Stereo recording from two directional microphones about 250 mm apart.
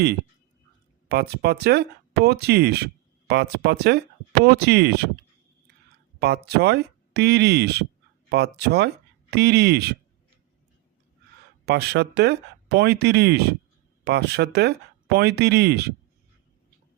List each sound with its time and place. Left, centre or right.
1.0 s speech: right
6.1 s speech: right
11.6 s speech: right